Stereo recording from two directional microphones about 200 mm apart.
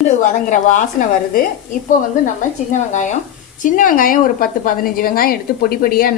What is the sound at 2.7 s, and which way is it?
Frying, 35° left (ahead or behind).